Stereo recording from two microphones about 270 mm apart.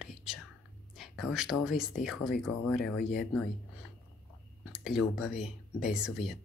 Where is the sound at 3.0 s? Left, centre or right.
Left.